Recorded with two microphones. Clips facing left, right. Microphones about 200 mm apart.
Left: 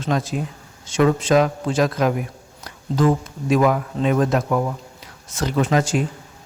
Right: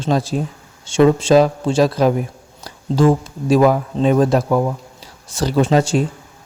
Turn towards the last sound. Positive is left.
turn(degrees=-30)  # may be behind; listen again after turning